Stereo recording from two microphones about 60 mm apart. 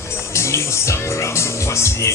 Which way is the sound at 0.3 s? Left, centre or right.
Left.